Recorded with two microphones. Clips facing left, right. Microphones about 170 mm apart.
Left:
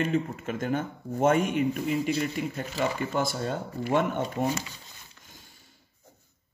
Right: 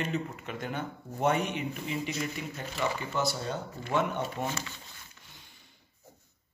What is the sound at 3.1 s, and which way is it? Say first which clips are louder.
Speech: left 3 dB; 50° left (ahead or behind).